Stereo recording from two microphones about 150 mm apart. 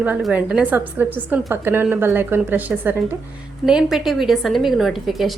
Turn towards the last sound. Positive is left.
turn(degrees=0)  # may be behind; listen again after turning